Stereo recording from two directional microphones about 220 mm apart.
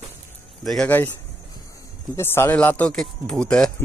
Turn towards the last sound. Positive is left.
turn(degrees=5)  # may be behind; listen again after turning